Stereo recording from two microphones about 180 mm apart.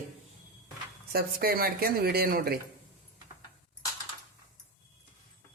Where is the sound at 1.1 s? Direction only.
60° right (ahead or behind).